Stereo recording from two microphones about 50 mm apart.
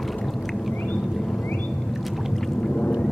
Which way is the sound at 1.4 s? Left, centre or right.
Left.